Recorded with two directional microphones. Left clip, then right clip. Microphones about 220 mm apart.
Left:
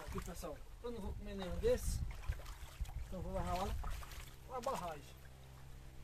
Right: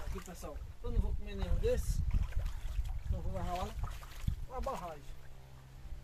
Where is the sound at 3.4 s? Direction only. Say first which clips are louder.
Right 1 dB; 15° left (ahead or behind).